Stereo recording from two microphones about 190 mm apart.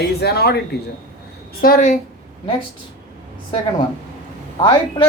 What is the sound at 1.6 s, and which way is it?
Speech, 45° left (ahead or behind).